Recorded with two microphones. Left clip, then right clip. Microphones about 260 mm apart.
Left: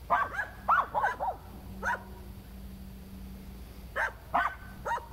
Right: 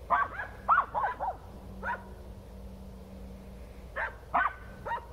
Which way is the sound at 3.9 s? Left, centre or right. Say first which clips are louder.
Even; left.